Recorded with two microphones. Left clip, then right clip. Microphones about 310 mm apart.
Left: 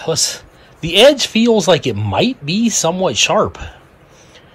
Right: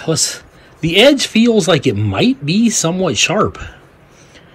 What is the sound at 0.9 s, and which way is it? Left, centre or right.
Speech, left.